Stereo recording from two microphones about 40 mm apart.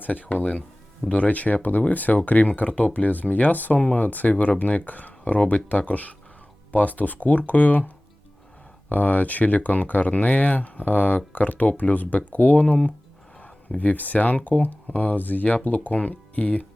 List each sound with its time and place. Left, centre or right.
0.0 s speech: left
15.4 s speech: left